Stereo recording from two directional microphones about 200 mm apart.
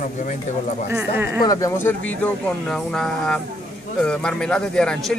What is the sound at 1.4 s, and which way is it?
A man's voice, 15° left (ahead or behind).